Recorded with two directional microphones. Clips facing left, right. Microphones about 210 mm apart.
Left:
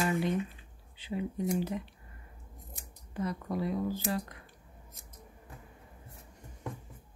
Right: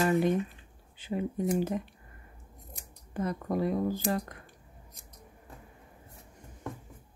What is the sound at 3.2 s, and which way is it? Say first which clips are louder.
Speech: right 3 dB; 50° right (ahead or behind).